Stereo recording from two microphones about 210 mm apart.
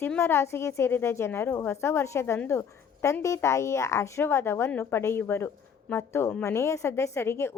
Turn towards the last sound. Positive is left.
turn(degrees=10)  # may be behind; listen again after turning